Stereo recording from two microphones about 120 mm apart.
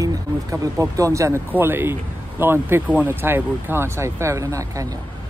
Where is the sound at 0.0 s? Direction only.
30° right (ahead or behind).